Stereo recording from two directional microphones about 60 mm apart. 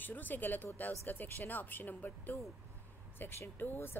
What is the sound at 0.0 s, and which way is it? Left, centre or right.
Speech, left.